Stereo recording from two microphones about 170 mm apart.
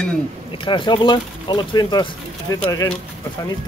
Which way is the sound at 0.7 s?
25° left (ahead or behind).